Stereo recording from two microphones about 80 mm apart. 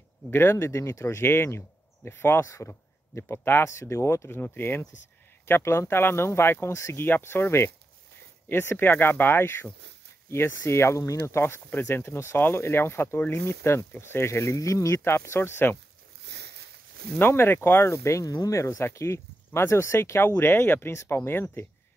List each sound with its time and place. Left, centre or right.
0.3 s speech: left
17.2 s speech: left